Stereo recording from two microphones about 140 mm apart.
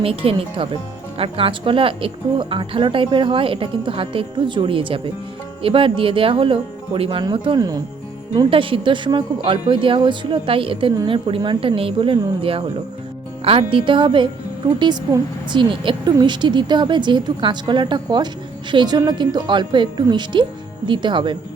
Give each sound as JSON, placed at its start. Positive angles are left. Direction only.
{"t": 0.0, "sound": "a woman's voice", "side_deg": -40}